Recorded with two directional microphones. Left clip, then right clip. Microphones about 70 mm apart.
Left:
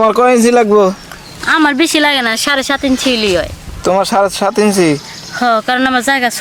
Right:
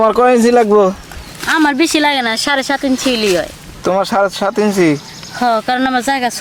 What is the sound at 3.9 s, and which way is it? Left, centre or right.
Speech, centre.